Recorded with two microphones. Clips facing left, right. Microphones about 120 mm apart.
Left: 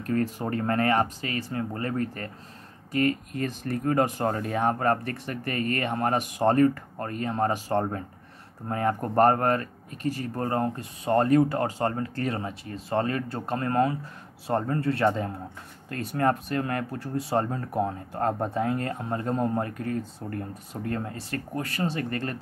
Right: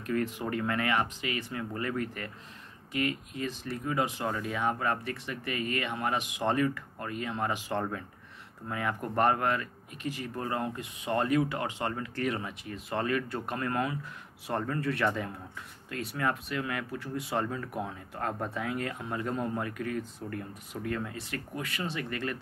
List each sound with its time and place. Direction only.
0.0 s speech: 40° left (ahead or behind)